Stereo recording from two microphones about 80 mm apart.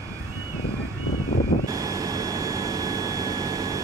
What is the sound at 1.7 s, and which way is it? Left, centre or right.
Vehicle, right.